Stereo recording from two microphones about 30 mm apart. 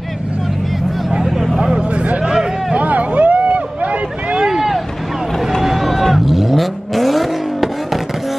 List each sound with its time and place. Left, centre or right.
1.6 s vehicle: right
2.9 s vehicle: right
4.3 s a sound: right
5.6 s vehicle: centre